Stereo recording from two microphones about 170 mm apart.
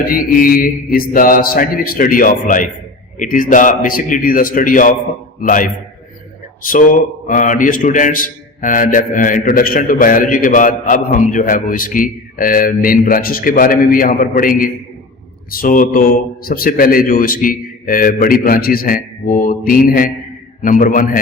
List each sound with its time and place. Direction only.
0.0 s a man's voice: 55° left (ahead or behind)